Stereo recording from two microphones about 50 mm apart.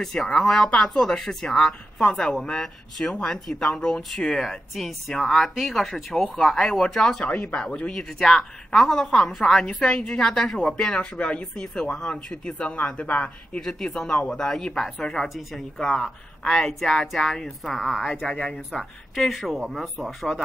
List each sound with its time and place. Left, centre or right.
0.0 s speech: centre
12.6 s speech: left
13.6 s speech: centre
15.9 s speech: centre
17.7 s speech: centre
18.2 s speech: centre